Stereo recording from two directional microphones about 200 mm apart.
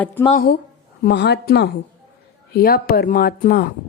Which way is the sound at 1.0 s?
55° left (ahead or behind).